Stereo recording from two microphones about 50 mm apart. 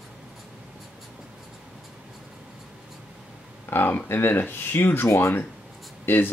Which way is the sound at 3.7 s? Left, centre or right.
Left.